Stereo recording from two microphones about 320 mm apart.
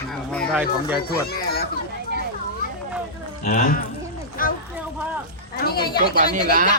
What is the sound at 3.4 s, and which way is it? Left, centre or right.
Speech, left.